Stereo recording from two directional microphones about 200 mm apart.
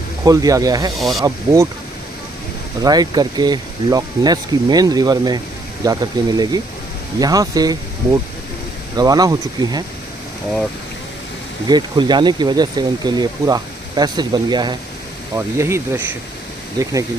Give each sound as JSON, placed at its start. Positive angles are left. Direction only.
{"t": 0.3, "sound": "speech", "side_deg": -15}
{"t": 0.9, "sound": "speech", "side_deg": 0}
{"t": 2.8, "sound": "speech", "side_deg": -20}
{"t": 11.7, "sound": "speech", "side_deg": -20}